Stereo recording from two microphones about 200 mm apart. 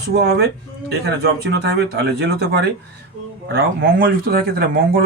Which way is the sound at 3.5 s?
50° right (ahead or behind).